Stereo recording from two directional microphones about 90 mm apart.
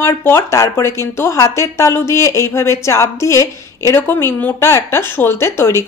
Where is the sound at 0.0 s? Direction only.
25° left (ahead or behind).